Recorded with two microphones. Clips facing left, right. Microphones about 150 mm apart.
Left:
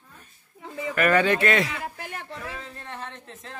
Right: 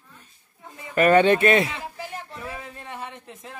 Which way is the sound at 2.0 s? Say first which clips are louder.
Right 2 dB; 65° left (ahead or behind).